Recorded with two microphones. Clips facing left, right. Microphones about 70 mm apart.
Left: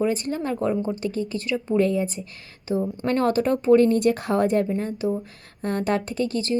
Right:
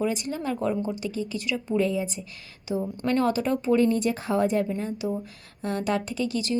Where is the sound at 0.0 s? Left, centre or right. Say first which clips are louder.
Left 3 dB; left.